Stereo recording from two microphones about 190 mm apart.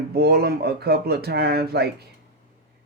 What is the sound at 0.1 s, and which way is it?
Speech, 55° right (ahead or behind).